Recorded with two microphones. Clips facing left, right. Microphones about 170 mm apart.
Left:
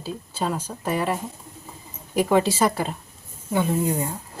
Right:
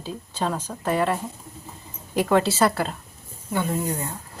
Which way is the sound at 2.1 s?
15° left (ahead or behind).